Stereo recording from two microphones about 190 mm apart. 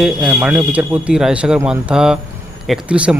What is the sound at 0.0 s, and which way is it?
A man's voice, 5° right (ahead or behind).